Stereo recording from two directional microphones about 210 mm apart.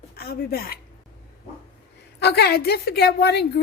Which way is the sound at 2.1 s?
50° left (ahead or behind).